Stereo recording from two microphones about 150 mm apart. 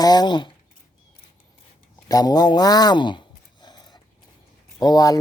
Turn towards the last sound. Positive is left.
turn(degrees=25)  # may be behind; listen again after turning